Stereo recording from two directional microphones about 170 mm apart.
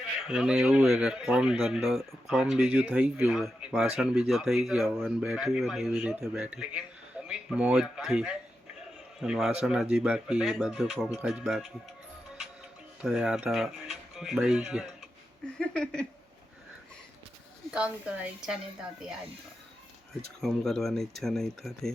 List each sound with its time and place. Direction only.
0.2 s a man's voice: 5° right (ahead or behind)
13.0 s speech: 5° right (ahead or behind)
17.7 s a man's voice: 5° right (ahead or behind)
20.4 s a man's voice: centre (ahead or behind)